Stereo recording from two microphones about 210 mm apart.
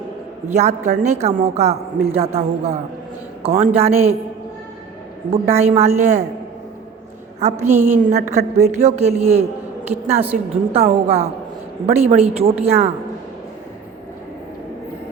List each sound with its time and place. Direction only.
0.4 s a woman's voice: 35° right (ahead or behind)
5.3 s a woman's voice: 30° right (ahead or behind)
7.3 s a woman's voice: 30° right (ahead or behind)